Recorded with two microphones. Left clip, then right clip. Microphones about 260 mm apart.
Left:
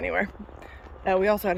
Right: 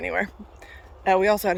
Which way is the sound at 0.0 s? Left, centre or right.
Centre.